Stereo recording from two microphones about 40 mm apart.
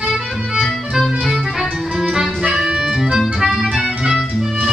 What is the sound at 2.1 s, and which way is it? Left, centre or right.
Music, centre.